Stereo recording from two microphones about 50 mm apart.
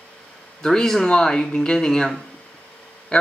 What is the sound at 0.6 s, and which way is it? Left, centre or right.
Speech, centre.